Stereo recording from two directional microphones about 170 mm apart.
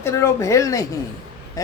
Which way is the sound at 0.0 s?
15° left (ahead or behind).